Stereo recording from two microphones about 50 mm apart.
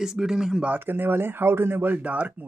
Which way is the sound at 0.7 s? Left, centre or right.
Right.